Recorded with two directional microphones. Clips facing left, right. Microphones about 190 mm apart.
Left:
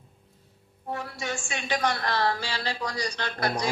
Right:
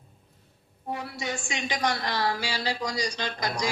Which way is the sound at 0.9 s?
15° right (ahead or behind).